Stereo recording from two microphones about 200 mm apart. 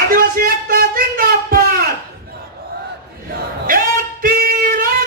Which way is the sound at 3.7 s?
45° right (ahead or behind).